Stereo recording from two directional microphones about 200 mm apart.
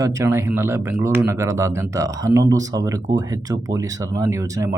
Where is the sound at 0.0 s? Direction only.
15° right (ahead or behind).